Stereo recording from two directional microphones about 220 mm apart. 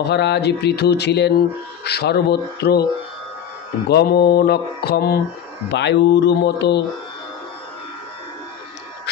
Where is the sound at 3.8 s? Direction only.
45° left (ahead or behind).